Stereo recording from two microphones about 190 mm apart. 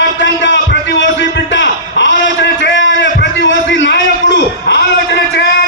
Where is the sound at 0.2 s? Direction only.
70° left (ahead or behind).